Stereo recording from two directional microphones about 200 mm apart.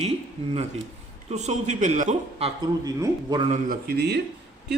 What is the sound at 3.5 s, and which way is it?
Speech, 45° right (ahead or behind).